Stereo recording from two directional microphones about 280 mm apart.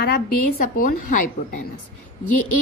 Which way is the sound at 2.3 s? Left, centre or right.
Left.